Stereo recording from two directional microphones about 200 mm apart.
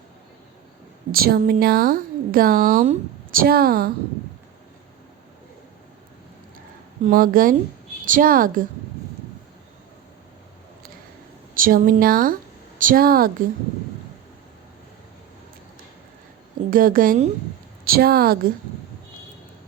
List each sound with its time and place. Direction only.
1.1 s speech: 50° right (ahead or behind)
3.4 s speech: 50° right (ahead or behind)
7.0 s speech: 45° right (ahead or behind)
11.5 s speech: 45° right (ahead or behind)
16.6 s speech: 45° right (ahead or behind)